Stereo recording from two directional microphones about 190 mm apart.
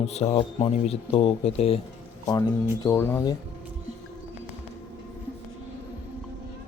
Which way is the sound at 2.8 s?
15° left (ahead or behind).